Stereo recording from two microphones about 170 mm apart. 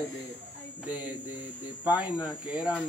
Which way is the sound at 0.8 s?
10° right (ahead or behind).